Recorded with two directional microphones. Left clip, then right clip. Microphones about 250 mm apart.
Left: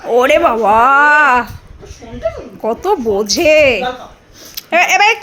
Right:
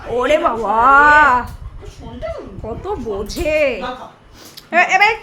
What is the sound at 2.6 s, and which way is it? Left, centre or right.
Speech, left.